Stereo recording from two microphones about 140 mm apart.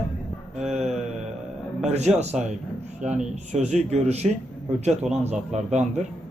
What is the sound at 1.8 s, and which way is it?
Speech, 50° right (ahead or behind).